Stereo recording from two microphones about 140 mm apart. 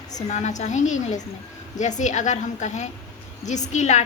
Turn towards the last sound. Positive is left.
turn(degrees=55)  # may be behind; listen again after turning